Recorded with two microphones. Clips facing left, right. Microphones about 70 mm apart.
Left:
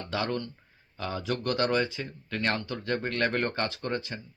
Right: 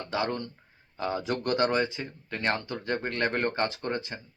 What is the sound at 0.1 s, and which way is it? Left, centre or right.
Speech, right.